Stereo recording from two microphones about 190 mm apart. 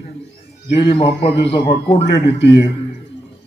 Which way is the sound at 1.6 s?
65° left (ahead or behind).